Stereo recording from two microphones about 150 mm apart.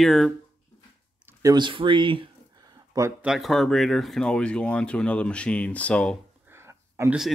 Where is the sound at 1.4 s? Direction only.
25° right (ahead or behind).